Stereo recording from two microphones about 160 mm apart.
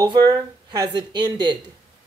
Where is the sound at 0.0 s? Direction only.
25° right (ahead or behind).